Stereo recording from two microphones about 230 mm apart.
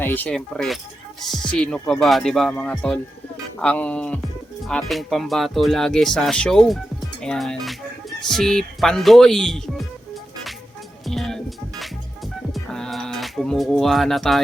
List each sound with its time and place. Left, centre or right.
0.0 s speech: centre
11.0 s music: centre